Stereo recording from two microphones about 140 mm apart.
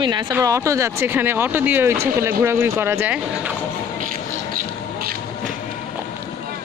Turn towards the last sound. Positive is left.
turn(degrees=-90)